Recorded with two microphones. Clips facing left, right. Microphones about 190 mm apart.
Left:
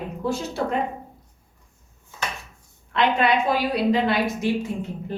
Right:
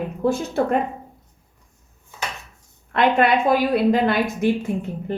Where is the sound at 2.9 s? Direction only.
55° right (ahead or behind).